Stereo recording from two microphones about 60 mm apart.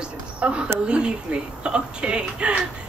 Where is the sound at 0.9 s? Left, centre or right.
Centre.